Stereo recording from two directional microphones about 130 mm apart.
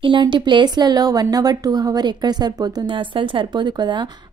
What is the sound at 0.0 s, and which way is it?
A woman's voice, 40° right (ahead or behind).